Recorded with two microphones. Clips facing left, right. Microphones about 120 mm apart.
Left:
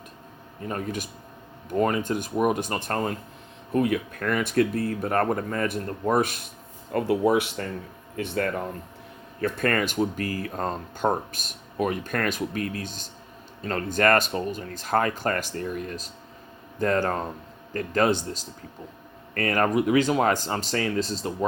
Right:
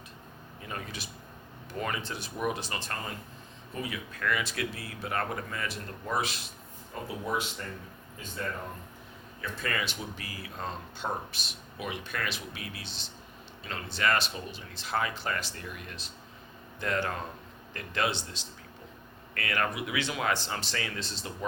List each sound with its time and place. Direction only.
0.6 s speech: 40° left (ahead or behind)
6.9 s speech: 70° left (ahead or behind)
9.4 s speech: 55° left (ahead or behind)